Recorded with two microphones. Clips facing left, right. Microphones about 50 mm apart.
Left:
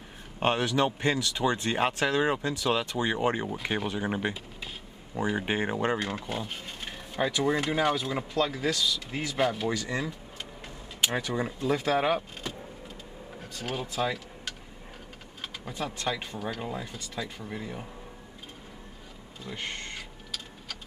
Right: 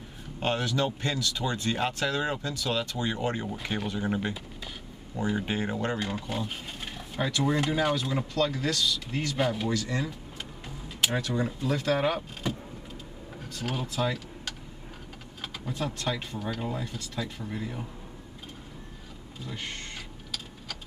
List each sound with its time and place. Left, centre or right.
0.4 s speech: left
5.9 s speech: centre
11.1 s speech: centre
12.4 s vehicle: centre
13.5 s speech: centre
19.4 s a sound: centre